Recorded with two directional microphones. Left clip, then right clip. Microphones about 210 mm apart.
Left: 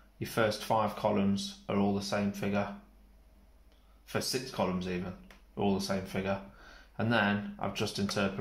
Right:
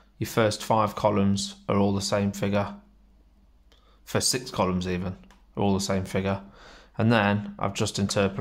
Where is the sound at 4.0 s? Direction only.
45° right (ahead or behind).